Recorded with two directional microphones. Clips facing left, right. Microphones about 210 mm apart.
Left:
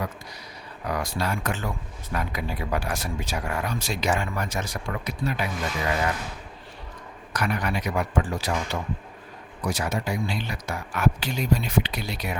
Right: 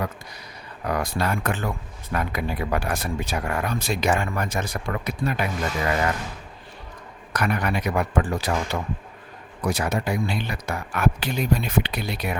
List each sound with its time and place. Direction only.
0.9 s speech: 55° right (ahead or behind)
7.3 s speech: 55° right (ahead or behind)